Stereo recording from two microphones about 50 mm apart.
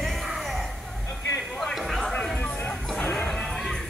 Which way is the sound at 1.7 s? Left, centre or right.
Centre.